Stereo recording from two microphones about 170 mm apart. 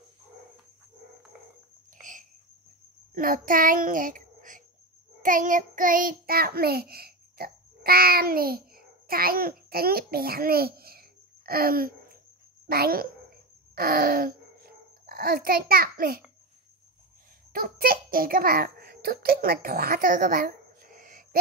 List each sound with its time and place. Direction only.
3.2 s a child's voice: 55° right (ahead or behind)
5.2 s child singing: 50° right (ahead or behind)
12.6 s a child's voice: 65° right (ahead or behind)
17.5 s a child's voice: 60° right (ahead or behind)